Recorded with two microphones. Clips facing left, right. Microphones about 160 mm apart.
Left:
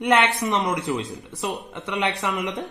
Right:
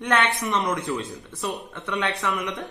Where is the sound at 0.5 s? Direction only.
20° left (ahead or behind).